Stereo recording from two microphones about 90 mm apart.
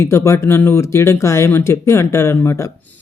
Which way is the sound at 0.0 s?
30° left (ahead or behind).